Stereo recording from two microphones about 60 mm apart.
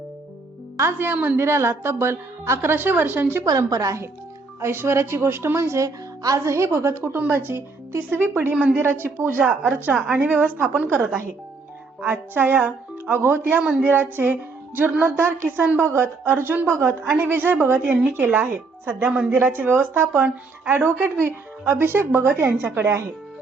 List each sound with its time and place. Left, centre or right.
0.8 s speech: right
1.4 s speech: right
3.7 s speech: right
4.6 s a woman's voice: right
8.8 s speech: right
9.6 s a woman's voice: right
12.0 s a woman's voice: right
15.8 s speech: right